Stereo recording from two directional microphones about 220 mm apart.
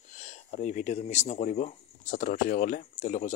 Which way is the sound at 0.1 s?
30° left (ahead or behind).